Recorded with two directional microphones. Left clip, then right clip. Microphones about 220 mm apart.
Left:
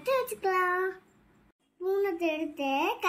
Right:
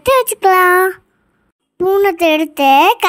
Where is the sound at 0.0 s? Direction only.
40° right (ahead or behind).